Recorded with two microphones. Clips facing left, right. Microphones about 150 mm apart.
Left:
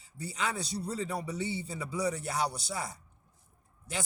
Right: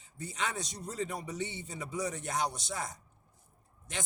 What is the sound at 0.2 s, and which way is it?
Speech, 35° left (ahead or behind).